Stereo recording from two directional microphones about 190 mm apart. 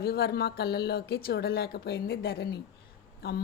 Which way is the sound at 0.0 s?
55° left (ahead or behind).